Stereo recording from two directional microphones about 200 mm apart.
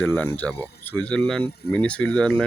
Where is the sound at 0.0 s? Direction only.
5° left (ahead or behind).